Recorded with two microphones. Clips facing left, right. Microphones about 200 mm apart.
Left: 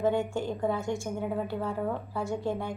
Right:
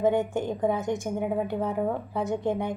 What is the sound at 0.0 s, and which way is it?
A woman's voice, 20° right (ahead or behind).